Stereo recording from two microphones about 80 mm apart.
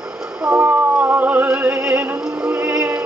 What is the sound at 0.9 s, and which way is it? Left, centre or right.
Music, centre.